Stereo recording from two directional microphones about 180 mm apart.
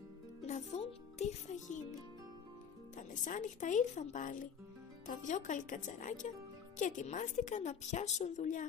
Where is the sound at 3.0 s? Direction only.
45° left (ahead or behind).